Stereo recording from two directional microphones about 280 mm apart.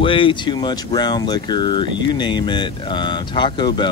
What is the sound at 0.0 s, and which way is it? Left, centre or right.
Speech, centre.